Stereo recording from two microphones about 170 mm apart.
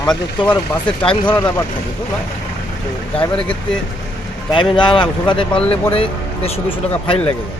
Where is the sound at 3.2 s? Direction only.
5° left (ahead or behind).